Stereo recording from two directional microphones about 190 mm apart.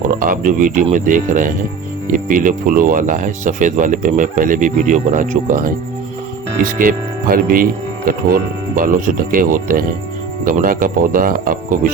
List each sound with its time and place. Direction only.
0.2 s speech: 45° right (ahead or behind)
6.7 s speech: 50° right (ahead or behind)